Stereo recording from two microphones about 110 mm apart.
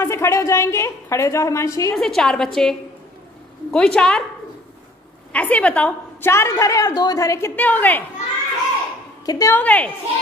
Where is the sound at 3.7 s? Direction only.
10° left (ahead or behind).